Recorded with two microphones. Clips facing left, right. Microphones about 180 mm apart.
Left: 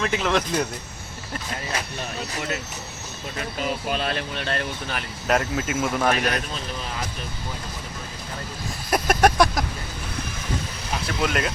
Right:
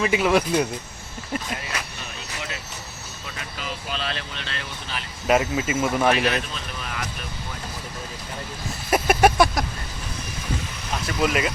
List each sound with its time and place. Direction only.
0.0 s speech: 10° right (ahead or behind)
3.3 s speech: 50° left (ahead or behind)
5.3 s speech: 5° right (ahead or behind)
6.1 s speech: 45° left (ahead or behind)
8.9 s vehicle: 5° right (ahead or behind)
11.0 s speech: centre (ahead or behind)